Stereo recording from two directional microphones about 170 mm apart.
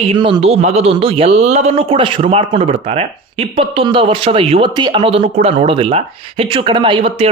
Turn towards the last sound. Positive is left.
turn(degrees=-35)  # may be behind; listen again after turning